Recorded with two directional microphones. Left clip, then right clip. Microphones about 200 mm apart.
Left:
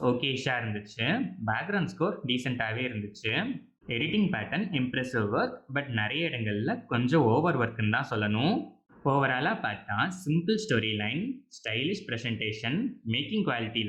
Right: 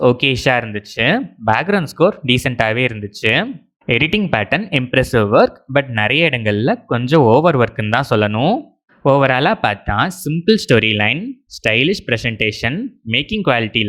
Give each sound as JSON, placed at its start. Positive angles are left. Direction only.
{"t": 0.0, "sound": "speech", "side_deg": -45}
{"t": 8.3, "sound": "speech", "side_deg": -30}
{"t": 9.0, "sound": "speech", "side_deg": -40}